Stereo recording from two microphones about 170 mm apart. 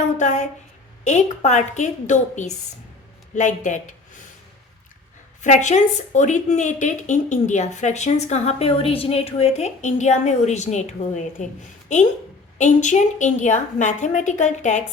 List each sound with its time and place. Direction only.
0.2 s speech: 45° left (ahead or behind)
5.4 s speech: 45° left (ahead or behind)